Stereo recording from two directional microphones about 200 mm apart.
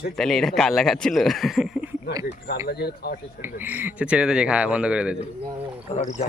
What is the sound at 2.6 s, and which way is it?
Speech, 55° left (ahead or behind).